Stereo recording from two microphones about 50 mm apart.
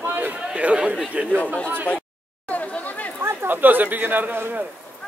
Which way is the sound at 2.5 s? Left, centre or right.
Left.